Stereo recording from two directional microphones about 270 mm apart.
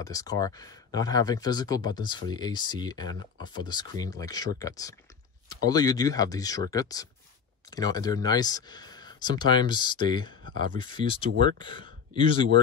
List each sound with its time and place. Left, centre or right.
0.0 s speech: centre